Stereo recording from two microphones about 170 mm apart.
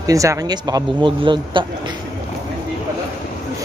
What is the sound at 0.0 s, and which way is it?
A man's voice, 20° right (ahead or behind).